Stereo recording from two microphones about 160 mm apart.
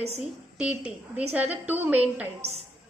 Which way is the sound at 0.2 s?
5° right (ahead or behind).